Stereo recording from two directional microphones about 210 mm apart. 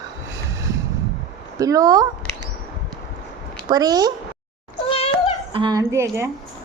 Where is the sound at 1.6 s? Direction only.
15° right (ahead or behind).